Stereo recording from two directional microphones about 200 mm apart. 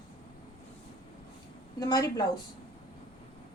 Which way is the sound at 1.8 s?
20° left (ahead or behind).